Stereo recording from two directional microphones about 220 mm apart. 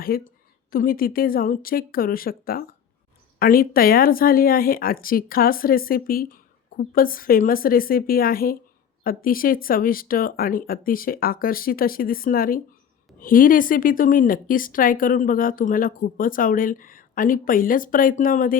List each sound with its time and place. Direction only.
0.1 s a woman's voice: 40° left (ahead or behind)